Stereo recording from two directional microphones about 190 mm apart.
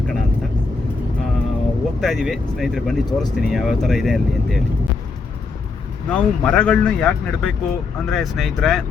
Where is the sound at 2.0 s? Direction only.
Centre (ahead or behind).